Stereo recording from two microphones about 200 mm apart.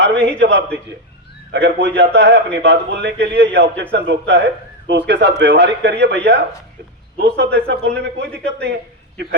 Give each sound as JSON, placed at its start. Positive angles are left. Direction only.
{"t": 0.3, "sound": "a man's voice", "side_deg": -60}